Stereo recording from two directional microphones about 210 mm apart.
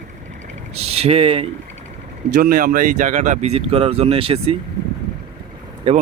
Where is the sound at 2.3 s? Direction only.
40° right (ahead or behind); by 4.5 s 25° right (ahead or behind).